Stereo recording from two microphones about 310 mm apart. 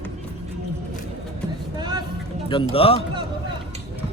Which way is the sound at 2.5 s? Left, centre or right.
Centre.